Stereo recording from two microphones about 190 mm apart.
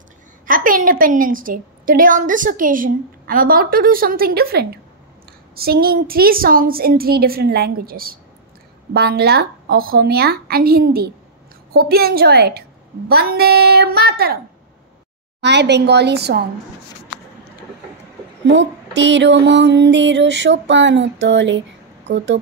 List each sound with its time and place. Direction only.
0.5 s a woman's voice: 45° right (ahead or behind)
15.4 s a woman's voice: 65° right (ahead or behind)
18.4 s a sound: 65° right (ahead or behind)